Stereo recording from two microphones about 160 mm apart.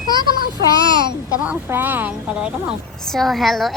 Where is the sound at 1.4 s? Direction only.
10° right (ahead or behind).